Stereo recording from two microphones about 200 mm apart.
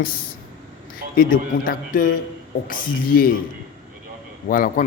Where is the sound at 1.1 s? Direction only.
45° left (ahead or behind).